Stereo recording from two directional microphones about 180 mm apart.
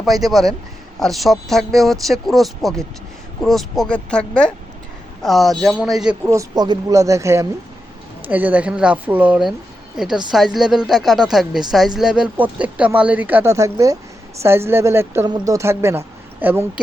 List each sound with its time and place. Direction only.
0.0 s speech: centre (ahead or behind)
6.2 s speech: 20° right (ahead or behind)